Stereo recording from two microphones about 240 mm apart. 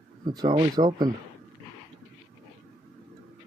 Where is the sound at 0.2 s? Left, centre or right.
Centre.